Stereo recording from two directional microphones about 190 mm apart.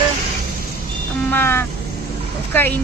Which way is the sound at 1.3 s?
10° left (ahead or behind).